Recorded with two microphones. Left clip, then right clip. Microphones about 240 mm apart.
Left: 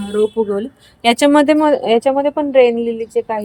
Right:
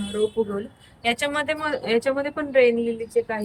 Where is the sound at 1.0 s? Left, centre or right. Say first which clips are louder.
Left 12 dB; left.